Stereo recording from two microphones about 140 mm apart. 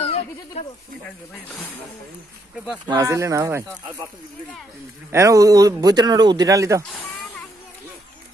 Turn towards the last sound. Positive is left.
turn(degrees=-25)  # may be behind; listen again after turning